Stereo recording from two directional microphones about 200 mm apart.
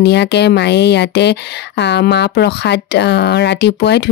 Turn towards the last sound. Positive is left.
turn(degrees=55)  # may be behind; listen again after turning